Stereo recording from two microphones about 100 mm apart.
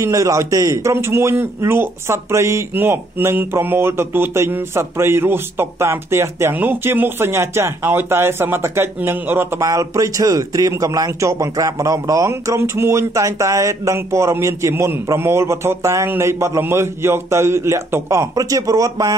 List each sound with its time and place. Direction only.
0.0 s a man's voice: 30° right (ahead or behind)